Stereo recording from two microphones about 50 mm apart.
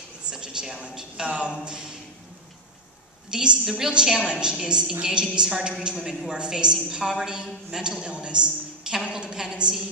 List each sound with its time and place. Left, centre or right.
0.3 s a woman's voice: centre
3.3 s a woman's voice: centre